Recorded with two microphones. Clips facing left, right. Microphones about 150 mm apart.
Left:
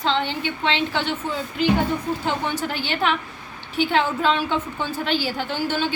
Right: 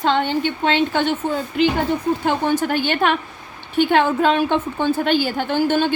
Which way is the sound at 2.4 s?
50° right (ahead or behind).